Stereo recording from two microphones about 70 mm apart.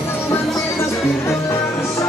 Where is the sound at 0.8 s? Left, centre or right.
Left.